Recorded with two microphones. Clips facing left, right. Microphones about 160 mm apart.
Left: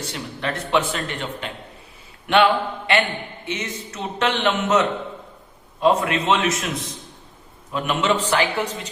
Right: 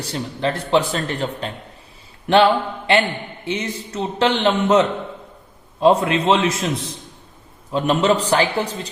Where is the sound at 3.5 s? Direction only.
30° right (ahead or behind).